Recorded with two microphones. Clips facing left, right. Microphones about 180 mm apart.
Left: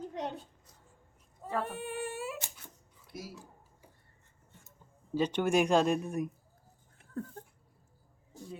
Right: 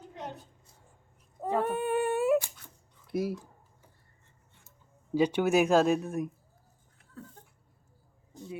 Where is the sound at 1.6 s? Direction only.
55° right (ahead or behind).